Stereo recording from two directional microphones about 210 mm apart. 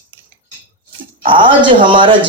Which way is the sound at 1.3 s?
25° right (ahead or behind).